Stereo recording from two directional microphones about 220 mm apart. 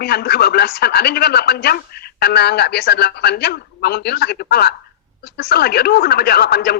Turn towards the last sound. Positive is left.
turn(degrees=45)  # may be behind; listen again after turning